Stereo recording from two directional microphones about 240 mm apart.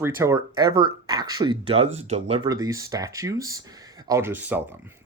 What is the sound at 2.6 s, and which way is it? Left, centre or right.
Speech, centre.